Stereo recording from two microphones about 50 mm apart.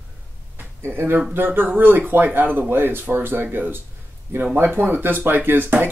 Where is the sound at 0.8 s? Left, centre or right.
Right.